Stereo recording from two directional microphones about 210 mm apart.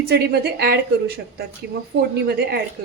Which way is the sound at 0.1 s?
50° right (ahead or behind).